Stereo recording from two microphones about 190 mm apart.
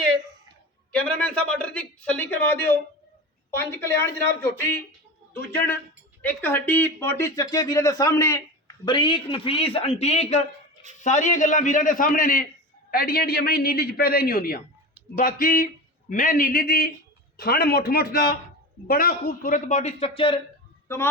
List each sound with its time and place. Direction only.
0.9 s a man's voice: 5° left (ahead or behind)
4.9 s a sound: 10° left (ahead or behind)
6.2 s a man's voice: 10° left (ahead or behind); by 20.4 s 30° left (ahead or behind)
20.8 s speech: 15° left (ahead or behind)